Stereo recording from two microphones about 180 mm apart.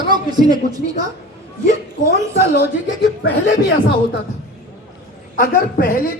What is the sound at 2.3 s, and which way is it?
Speech, 65° left (ahead or behind).